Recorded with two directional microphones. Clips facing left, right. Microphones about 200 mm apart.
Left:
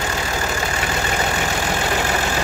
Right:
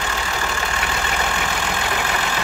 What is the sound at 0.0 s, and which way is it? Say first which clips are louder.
Vehicle: left 2 dB; 35° left (ahead or behind).